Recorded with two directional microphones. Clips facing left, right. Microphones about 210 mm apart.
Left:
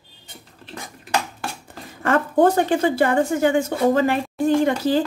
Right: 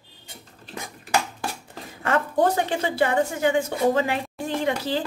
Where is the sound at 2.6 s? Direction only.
45° left (ahead or behind).